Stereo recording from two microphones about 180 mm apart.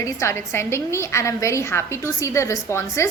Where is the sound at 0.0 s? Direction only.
15° left (ahead or behind).